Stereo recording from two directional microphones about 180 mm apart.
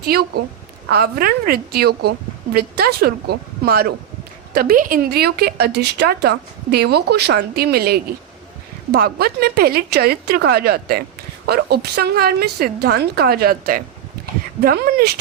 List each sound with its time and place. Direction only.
0.0 s a woman's voice: 60° right (ahead or behind)